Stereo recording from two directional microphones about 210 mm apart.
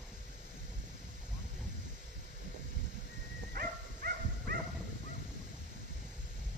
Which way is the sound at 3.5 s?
45° right (ahead or behind).